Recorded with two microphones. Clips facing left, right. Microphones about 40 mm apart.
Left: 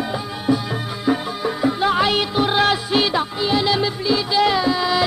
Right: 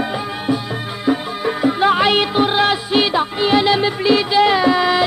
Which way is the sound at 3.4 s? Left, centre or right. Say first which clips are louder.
Right 5 dB; right.